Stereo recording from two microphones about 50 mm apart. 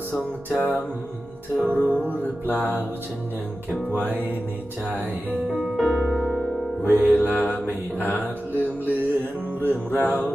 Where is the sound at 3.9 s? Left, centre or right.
Right.